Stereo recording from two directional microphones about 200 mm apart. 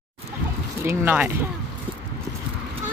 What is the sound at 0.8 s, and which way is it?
Speech, 10° right (ahead or behind).